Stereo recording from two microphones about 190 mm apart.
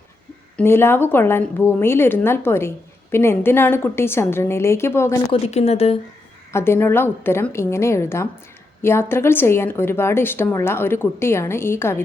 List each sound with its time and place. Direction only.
0.5 s a woman's voice: 10° left (ahead or behind)
5.3 s a woman's voice: 35° left (ahead or behind)
6.5 s a woman's voice: 15° left (ahead or behind)